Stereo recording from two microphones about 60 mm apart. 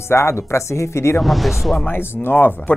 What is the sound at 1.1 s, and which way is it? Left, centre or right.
Speech, centre.